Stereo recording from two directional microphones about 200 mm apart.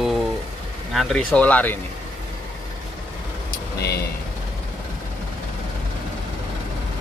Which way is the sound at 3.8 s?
55° left (ahead or behind).